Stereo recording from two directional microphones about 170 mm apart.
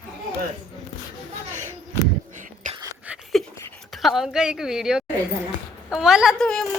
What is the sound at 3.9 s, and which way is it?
A woman's voice, centre (ahead or behind).